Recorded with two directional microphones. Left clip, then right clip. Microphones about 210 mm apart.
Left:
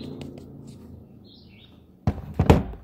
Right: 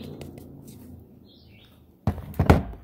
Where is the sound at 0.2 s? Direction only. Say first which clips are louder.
Left 2 dB; 20° right (ahead or behind).